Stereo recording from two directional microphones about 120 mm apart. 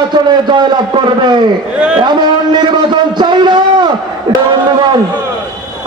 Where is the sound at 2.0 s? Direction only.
40° right (ahead or behind).